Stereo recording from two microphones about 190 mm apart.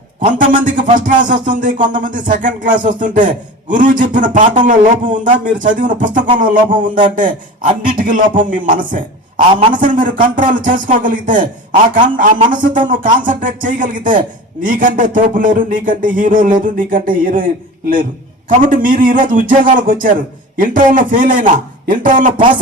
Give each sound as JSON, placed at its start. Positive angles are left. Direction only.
{"t": 0.3, "sound": "a man's voice", "side_deg": -45}